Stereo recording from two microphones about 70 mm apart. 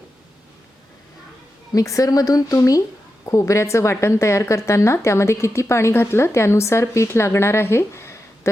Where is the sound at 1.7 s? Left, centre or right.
Left.